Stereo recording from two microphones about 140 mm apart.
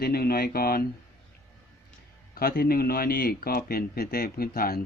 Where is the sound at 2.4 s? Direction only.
90° left.